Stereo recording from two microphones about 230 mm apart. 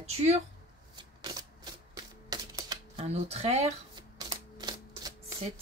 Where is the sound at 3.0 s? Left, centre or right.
Right.